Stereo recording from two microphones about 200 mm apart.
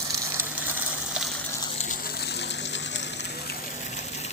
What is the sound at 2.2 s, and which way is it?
Water, 55° left (ahead or behind).